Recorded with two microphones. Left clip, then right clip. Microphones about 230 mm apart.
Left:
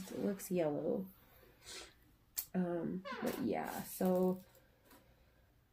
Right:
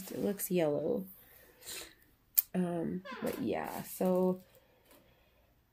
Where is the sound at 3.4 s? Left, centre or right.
Right.